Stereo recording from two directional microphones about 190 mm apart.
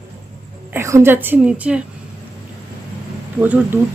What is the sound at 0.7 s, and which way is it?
A woman's voice, 15° right (ahead or behind).